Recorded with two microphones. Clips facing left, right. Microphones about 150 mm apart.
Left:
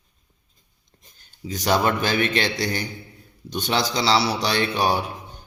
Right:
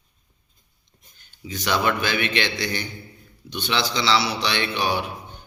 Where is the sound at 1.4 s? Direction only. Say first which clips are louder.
Left 2 dB; 40° left (ahead or behind).